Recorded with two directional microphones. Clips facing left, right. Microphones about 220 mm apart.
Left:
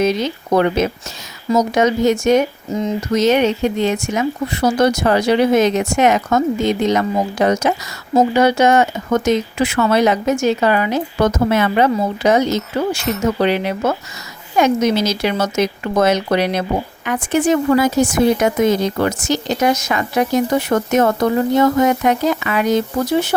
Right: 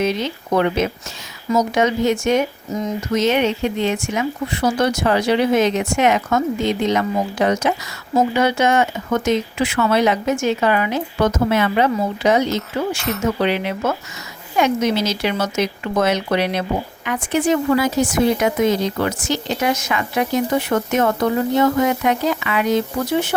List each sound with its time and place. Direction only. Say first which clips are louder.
0.0 s a woman's voice: left 3 dB; 40° left (ahead or behind)